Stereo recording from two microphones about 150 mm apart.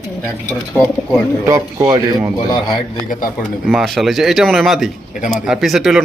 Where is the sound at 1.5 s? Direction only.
20° right (ahead or behind).